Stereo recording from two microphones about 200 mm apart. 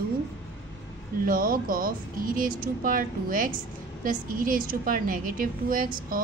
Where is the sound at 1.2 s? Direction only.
45° right (ahead or behind).